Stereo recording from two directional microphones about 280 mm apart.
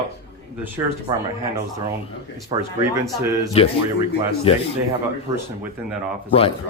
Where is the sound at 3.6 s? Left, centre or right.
Left.